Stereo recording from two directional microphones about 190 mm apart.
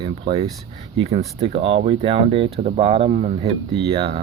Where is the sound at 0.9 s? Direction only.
35° right (ahead or behind).